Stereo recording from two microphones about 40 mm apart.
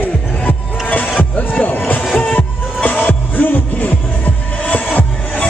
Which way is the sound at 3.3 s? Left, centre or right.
Left.